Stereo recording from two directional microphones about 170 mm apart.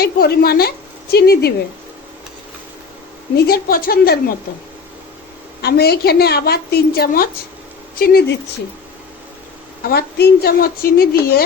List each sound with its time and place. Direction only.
0.0 s a woman's voice: 65° left (ahead or behind)
3.3 s a woman's voice: 65° left (ahead or behind)
5.6 s a woman's voice: 70° left (ahead or behind)
9.8 s a woman's voice: 65° left (ahead or behind)